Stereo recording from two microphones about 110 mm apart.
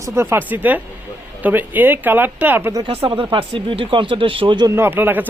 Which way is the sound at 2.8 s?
55° right (ahead or behind).